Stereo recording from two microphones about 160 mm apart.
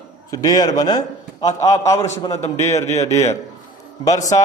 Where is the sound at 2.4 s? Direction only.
45° left (ahead or behind).